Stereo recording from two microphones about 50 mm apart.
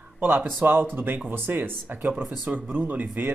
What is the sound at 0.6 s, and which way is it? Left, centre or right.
Speech, right.